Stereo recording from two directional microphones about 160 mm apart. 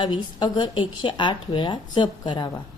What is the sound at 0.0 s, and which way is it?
Speech, 30° left (ahead or behind).